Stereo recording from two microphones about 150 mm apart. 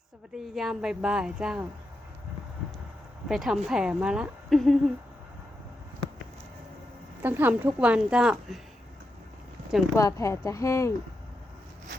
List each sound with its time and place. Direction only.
0.3 s speech: centre (ahead or behind)
3.2 s speech: centre (ahead or behind)
7.2 s speech: 10° right (ahead or behind)
9.9 s speech: 20° left (ahead or behind)